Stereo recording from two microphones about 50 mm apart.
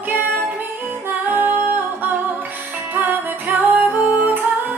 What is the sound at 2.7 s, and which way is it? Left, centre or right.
Music, right.